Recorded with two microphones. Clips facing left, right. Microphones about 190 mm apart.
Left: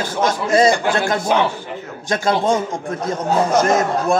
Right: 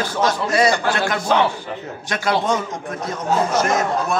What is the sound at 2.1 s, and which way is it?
Speech, 25° left (ahead or behind).